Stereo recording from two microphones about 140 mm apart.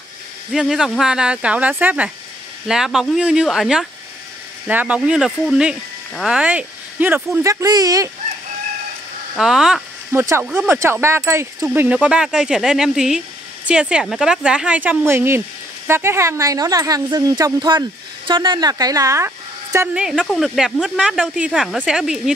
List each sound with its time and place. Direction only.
0.5 s speech: 5° right (ahead or behind)
7.4 s speech: 25° right (ahead or behind)
9.4 s speech: 5° right (ahead or behind)
10.1 s speech: 20° right (ahead or behind)
20.0 s speech: 5° right (ahead or behind)